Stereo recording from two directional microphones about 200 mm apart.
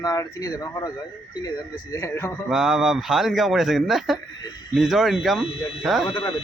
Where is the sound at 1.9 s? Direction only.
15° left (ahead or behind).